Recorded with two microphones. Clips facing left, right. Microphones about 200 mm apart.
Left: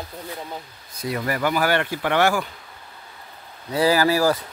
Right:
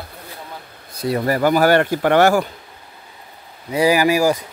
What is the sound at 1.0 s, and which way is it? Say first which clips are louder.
Speech: right 6 dB; 35° right (ahead or behind).